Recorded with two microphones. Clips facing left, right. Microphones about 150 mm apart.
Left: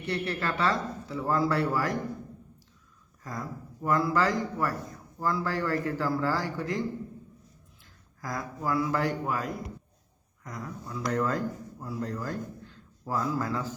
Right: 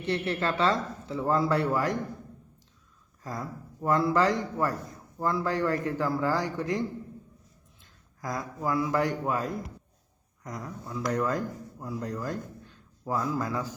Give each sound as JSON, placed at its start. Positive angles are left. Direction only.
{"t": 0.0, "sound": "speech", "side_deg": -20}
{"t": 3.2, "sound": "speech", "side_deg": -20}
{"t": 8.2, "sound": "speech", "side_deg": -20}